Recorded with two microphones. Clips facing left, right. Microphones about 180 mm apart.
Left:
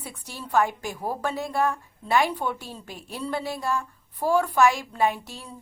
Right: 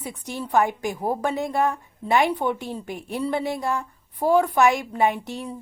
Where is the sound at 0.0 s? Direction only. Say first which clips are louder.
Right 7 dB; 15° right (ahead or behind).